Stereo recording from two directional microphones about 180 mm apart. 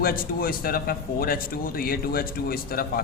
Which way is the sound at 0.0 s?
55° left (ahead or behind).